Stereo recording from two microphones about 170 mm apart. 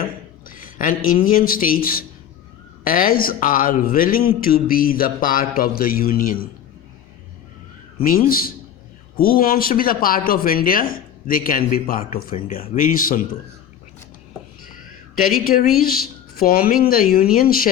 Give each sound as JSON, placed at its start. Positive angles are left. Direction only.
{"t": 0.0, "sound": "speech", "side_deg": 55}
{"t": 8.0, "sound": "speech", "side_deg": 55}
{"t": 15.1, "sound": "speech", "side_deg": 55}